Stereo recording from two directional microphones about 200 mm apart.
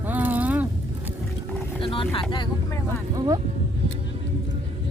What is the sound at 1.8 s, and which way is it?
Speech, 25° left (ahead or behind).